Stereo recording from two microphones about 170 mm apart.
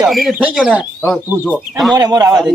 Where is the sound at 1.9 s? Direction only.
25° right (ahead or behind).